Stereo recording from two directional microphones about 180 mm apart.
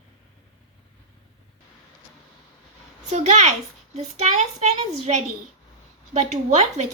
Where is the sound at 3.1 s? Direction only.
40° right (ahead or behind).